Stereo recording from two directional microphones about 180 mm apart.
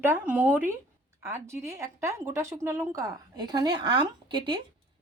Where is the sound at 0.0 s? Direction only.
10° right (ahead or behind).